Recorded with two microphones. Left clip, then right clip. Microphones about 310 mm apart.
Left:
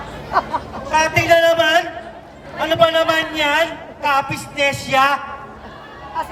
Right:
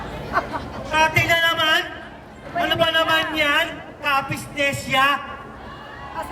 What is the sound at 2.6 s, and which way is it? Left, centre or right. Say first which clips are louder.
Speech: left 4 dB; centre.